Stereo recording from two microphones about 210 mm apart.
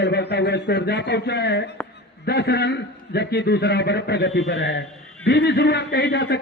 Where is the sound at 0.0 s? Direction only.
50° left (ahead or behind).